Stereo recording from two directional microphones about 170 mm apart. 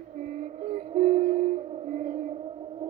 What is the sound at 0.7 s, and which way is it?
Music, 40° right (ahead or behind).